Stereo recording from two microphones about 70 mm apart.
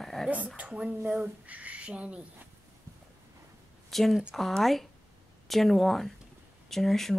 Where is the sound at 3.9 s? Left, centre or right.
Centre.